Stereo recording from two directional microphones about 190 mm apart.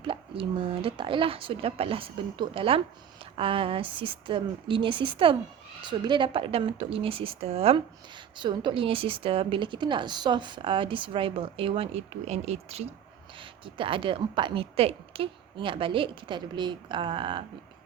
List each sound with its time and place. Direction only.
0.0 s speech: 30° right (ahead or behind)